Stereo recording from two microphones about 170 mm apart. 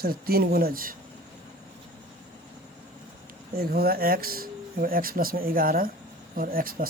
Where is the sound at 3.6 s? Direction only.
60° right (ahead or behind).